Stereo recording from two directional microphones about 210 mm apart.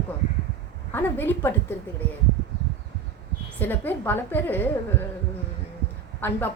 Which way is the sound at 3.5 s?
10° left (ahead or behind).